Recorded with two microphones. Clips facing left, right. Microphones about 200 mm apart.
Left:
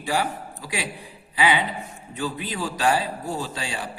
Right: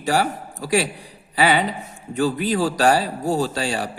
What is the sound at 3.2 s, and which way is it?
Speech, 90° right.